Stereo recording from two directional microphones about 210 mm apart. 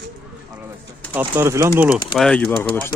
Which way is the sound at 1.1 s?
10° right (ahead or behind).